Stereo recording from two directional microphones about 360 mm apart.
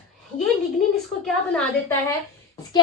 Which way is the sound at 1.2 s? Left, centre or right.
Centre.